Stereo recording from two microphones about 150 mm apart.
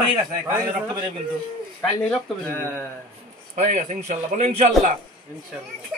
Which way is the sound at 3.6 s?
50° right (ahead or behind).